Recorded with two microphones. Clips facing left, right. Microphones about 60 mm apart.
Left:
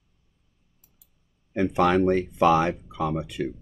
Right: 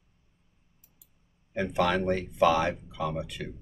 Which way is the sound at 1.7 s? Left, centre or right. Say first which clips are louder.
Left 5 dB; left.